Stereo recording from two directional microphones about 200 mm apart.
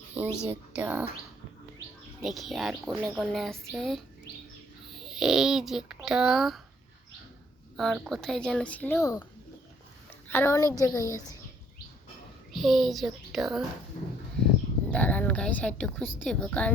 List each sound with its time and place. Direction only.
0.4 s speech: 10° right (ahead or behind)
2.2 s a child's voice: centre (ahead or behind)
7.8 s speech: centre (ahead or behind); by 9.2 s 15° left (ahead or behind)
10.2 s a child's voice: 10° left (ahead or behind)
12.5 s speech: centre (ahead or behind)
14.8 s a woman's voice: 5° left (ahead or behind)